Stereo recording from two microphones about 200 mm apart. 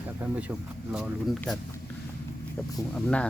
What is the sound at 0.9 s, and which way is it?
Speech, 5° right (ahead or behind).